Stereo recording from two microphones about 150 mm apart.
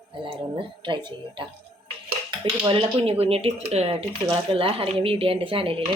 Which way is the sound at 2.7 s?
40° right (ahead or behind).